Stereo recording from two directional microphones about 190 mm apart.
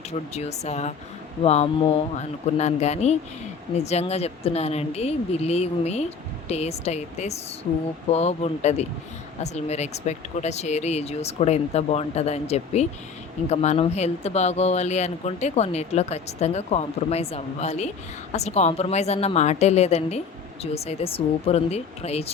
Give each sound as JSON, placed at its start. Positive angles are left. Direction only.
{"t": 0.3, "sound": "a woman's voice", "side_deg": 35}